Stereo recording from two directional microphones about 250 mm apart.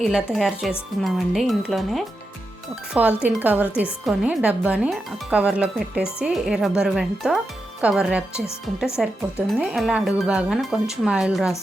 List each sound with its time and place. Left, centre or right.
0.0 s speech: centre